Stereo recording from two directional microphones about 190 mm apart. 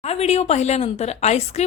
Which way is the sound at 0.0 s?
35° left (ahead or behind).